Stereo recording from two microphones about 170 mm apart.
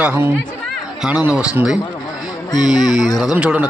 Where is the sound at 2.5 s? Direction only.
25° left (ahead or behind).